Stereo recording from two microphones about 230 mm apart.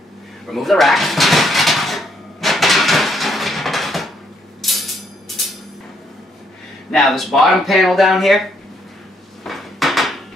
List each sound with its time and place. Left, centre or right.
0.5 s drawer open or close: centre
4.6 s music: centre
6.9 s speech: centre
9.4 s dishes: centre